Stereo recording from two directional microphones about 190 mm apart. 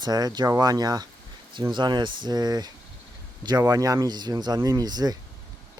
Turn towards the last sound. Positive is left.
turn(degrees=-20)  # may be behind; listen again after turning